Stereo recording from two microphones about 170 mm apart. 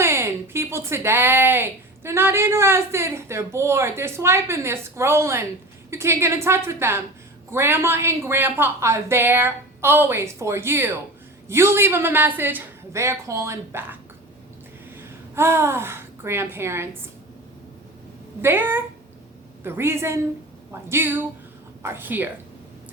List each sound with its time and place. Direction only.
0.0 s a woman's voice: 15° right (ahead or behind)
15.4 s a woman's voice: 15° right (ahead or behind)
18.4 s a woman's voice: 10° right (ahead or behind)